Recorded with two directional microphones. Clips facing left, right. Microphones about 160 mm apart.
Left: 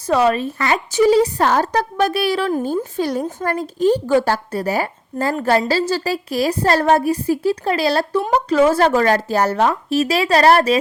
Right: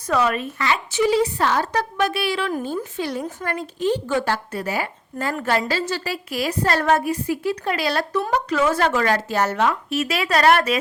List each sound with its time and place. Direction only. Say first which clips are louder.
0.1 s a woman's voice: left 5 dB; 30° left (ahead or behind)
0.6 s a woman's voice: left 5 dB; 40° left (ahead or behind)